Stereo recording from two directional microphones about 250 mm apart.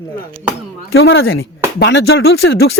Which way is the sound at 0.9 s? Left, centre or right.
Left.